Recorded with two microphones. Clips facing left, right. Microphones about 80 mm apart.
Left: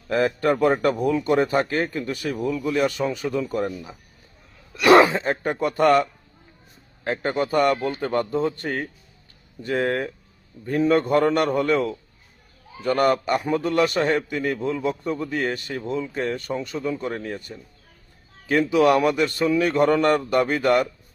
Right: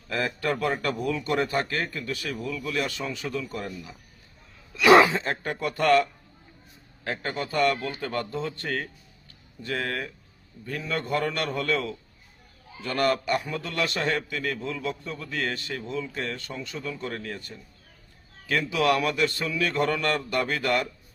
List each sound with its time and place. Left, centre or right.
0.1 s a man's voice: left
5.0 s a man's voice: centre
18.7 s a man's voice: left